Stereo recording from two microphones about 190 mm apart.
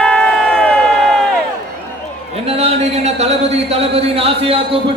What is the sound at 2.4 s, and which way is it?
A man's voice, 35° right (ahead or behind).